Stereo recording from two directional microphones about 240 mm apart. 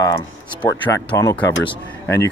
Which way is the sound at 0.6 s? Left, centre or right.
Centre.